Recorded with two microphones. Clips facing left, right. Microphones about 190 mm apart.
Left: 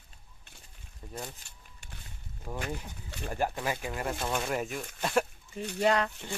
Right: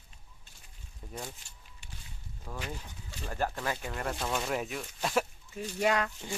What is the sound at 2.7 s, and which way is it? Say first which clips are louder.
Speech: left 3 dB; 15° left (ahead or behind).